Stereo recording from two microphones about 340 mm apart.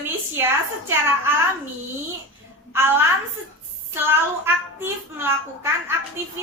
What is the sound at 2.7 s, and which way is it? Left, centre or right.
A child's voice, centre.